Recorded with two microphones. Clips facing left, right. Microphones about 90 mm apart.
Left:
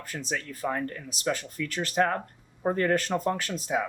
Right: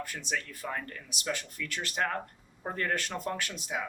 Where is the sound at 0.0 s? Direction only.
35° left (ahead or behind).